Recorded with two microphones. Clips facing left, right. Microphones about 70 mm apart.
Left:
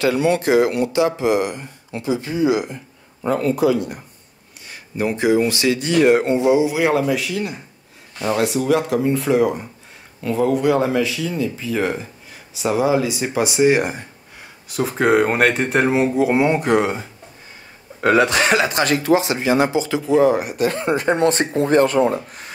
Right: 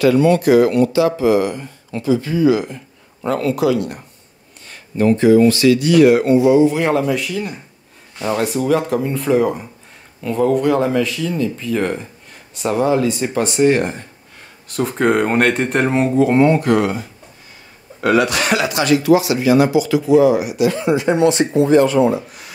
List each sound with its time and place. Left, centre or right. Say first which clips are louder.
0.0 s speech: right 5 dB; left
6.6 s speech: right 3 dB; centre; by 17.0 s left
18.0 s speech: even; left